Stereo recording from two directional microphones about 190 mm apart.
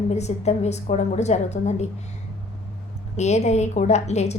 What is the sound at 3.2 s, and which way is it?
A woman's voice, 35° left (ahead or behind).